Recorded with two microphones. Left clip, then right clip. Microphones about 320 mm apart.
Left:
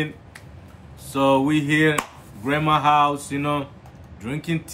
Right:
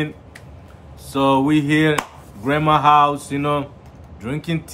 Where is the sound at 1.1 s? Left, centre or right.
Centre.